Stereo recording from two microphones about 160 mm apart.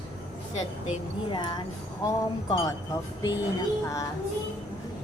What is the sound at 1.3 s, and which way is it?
A woman's voice, 30° left (ahead or behind).